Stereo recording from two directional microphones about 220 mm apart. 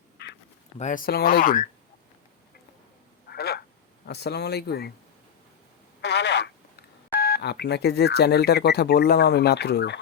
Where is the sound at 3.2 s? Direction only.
45° left (ahead or behind).